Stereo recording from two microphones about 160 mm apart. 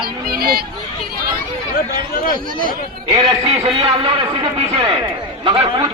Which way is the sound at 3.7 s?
35° right (ahead or behind).